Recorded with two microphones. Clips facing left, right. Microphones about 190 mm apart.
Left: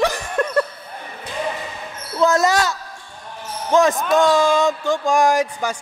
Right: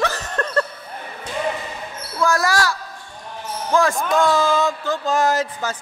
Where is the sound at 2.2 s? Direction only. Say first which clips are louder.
Left 3 dB; 20° left (ahead or behind).